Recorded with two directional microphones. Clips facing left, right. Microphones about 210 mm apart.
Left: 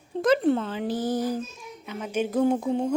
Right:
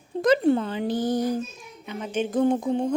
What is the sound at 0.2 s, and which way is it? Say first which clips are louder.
Speech: right 2 dB; centre (ahead or behind).